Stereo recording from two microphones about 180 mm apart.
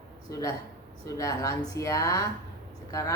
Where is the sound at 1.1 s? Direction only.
20° left (ahead or behind).